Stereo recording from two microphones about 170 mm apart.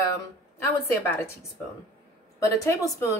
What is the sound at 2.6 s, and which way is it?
Speech, 20° left (ahead or behind).